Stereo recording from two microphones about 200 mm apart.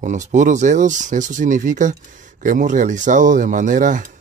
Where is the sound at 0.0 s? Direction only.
40° right (ahead or behind).